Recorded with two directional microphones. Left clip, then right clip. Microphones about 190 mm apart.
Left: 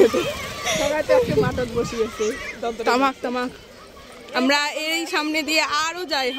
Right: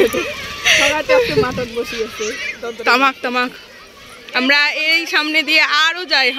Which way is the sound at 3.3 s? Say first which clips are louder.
Right 7 dB; 5° right (ahead or behind).